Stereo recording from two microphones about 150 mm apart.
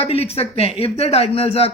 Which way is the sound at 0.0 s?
40° left (ahead or behind).